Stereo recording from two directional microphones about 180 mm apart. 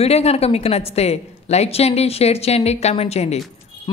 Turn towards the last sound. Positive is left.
turn(degrees=35)  # may be behind; listen again after turning